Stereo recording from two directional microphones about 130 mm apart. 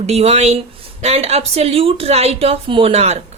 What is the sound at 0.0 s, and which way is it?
A woman's voice, 55° right (ahead or behind).